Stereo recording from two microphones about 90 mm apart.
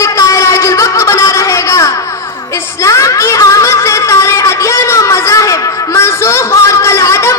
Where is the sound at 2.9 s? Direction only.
35° left (ahead or behind).